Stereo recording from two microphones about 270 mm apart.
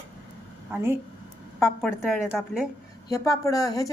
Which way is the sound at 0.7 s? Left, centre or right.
Centre.